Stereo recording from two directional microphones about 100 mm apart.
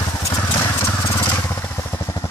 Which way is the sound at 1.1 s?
25° left (ahead or behind).